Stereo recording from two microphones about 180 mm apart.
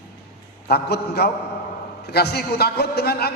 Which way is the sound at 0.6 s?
65° left (ahead or behind).